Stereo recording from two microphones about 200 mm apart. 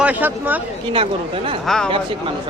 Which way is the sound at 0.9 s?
30° right (ahead or behind).